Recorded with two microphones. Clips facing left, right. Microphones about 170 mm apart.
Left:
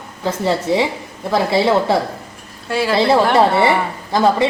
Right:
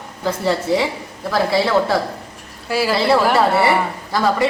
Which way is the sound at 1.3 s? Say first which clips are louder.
Left 2 dB; 25° left (ahead or behind).